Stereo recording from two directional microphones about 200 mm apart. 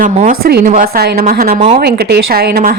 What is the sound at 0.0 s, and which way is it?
A woman's voice, 40° right (ahead or behind).